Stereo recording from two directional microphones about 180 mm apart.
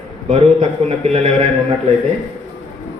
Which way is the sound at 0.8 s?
35° right (ahead or behind).